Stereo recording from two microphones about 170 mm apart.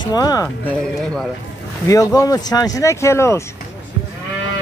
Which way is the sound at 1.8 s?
20° left (ahead or behind).